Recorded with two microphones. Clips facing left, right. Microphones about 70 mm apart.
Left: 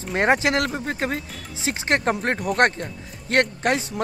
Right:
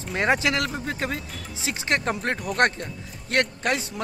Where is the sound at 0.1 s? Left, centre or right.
Left.